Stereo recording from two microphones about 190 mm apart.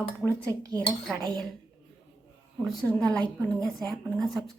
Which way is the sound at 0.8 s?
Centre (ahead or behind).